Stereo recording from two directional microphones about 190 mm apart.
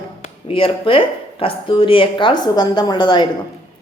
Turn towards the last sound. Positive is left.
turn(degrees=25)  # may be behind; listen again after turning